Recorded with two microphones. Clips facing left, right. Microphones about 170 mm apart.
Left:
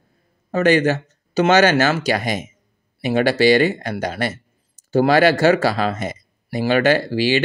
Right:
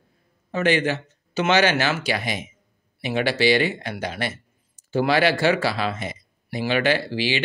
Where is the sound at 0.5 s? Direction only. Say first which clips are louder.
Left 5 dB; 45° left (ahead or behind).